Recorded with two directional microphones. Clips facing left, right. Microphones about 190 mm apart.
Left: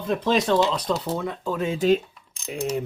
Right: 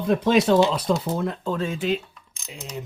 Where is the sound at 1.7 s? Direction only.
40° left (ahead or behind).